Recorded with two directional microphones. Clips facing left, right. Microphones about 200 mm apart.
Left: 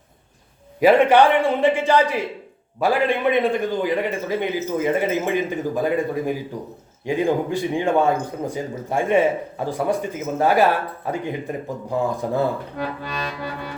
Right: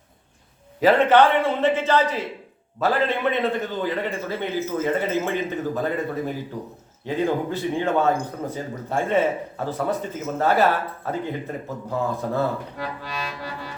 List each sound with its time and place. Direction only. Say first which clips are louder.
0.8 s speech: left 2 dB; 15° left (ahead or behind)
13.0 s music: left 3 dB; 55° left (ahead or behind)